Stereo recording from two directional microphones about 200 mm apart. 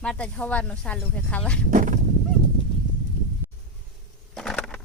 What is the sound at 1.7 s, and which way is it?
Speech, 40° right (ahead or behind).